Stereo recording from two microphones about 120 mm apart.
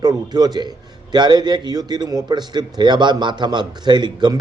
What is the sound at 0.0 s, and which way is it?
A man's voice, 35° right (ahead or behind).